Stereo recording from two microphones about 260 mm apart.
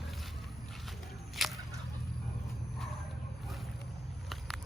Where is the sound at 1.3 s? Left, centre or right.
Centre.